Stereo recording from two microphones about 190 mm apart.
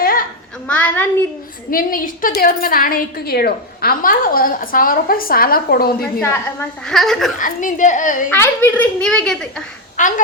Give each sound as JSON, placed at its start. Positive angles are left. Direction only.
{"t": 0.0, "sound": "a sound", "side_deg": 50}
{"t": 0.7, "sound": "speech", "side_deg": 10}
{"t": 1.7, "sound": "a woman's voice", "side_deg": 45}
{"t": 6.8, "sound": "a child's voice", "side_deg": 0}
{"t": 7.3, "sound": "a woman's voice", "side_deg": 45}
{"t": 8.3, "sound": "a child's voice", "side_deg": 10}
{"t": 10.0, "sound": "speech", "side_deg": 40}